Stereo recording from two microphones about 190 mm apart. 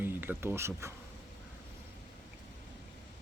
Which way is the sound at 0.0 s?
10° right (ahead or behind).